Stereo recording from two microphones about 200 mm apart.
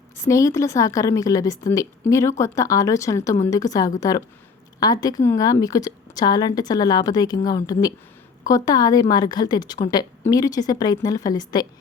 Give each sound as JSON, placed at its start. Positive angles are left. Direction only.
{"t": 0.3, "sound": "a woman's voice", "side_deg": 15}